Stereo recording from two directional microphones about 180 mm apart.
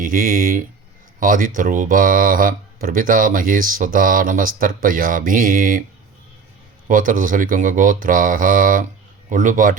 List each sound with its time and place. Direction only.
0.0 s speech: 50° right (ahead or behind)
6.8 s speech: 50° right (ahead or behind)